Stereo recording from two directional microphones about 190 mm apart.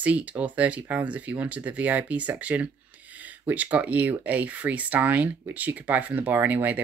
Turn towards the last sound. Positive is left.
turn(degrees=-10)  # may be behind; listen again after turning